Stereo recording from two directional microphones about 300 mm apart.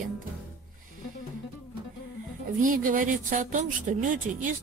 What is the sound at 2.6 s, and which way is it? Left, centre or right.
Speech, right.